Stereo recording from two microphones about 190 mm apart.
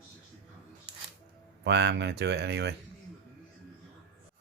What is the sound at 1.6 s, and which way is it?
Speech, 65° right (ahead or behind).